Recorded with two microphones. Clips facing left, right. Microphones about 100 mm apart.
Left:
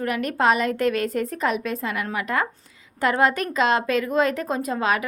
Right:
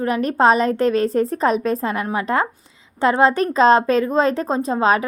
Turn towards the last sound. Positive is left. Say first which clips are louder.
# right 6 dB
turn(degrees=-30)  # may be behind; listen again after turning